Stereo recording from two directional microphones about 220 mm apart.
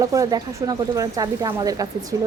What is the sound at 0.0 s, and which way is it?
Speech, 15° right (ahead or behind).